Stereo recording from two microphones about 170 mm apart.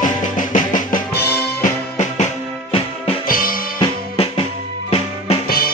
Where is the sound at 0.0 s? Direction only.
50° left (ahead or behind).